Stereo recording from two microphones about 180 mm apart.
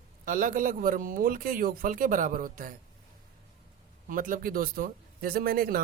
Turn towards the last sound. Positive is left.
turn(degrees=-55)  # may be behind; listen again after turning